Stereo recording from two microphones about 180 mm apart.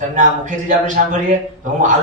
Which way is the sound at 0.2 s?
45° right (ahead or behind).